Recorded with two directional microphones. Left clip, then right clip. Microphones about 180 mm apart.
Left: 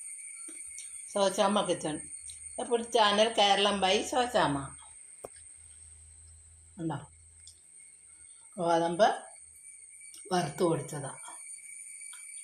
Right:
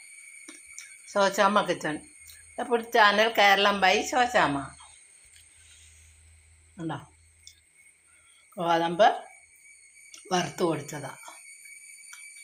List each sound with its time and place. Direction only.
0.8 s a woman's voice: 15° right (ahead or behind)
2.2 s a sound: 20° right (ahead or behind)
3.3 s a woman's voice: 15° right (ahead or behind)
6.7 s speech: 10° right (ahead or behind)
8.5 s a woman's voice: 20° right (ahead or behind)